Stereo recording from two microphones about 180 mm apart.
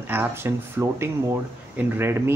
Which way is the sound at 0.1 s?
10° right (ahead or behind).